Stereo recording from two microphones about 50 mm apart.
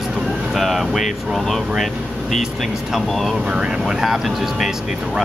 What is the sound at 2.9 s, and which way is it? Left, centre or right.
Speech, centre.